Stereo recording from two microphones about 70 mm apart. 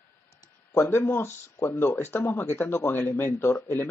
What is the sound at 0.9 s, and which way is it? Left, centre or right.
Speech, left.